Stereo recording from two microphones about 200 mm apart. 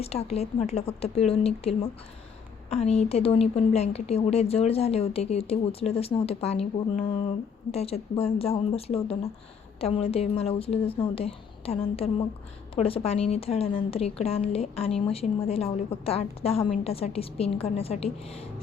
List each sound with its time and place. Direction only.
0.0 s a woman's voice: 30° left (ahead or behind)
16.6 s a woman's voice: 40° left (ahead or behind)
16.9 s a woman's voice: 30° left (ahead or behind)